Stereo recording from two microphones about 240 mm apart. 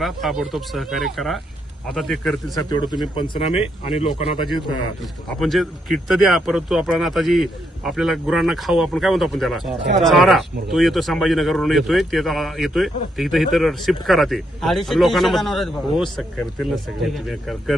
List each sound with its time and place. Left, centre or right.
0.0 s speech: centre
2.6 s speech: centre
4.1 s speech: centre